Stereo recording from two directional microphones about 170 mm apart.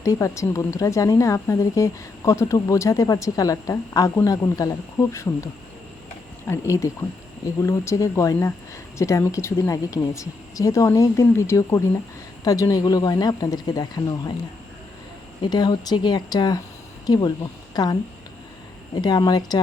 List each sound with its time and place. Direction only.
0.0 s a woman's voice: 20° left (ahead or behind)
6.5 s a woman's voice: 20° left (ahead or behind)
15.4 s a woman's voice: 25° left (ahead or behind)
19.0 s a woman's voice: 25° left (ahead or behind)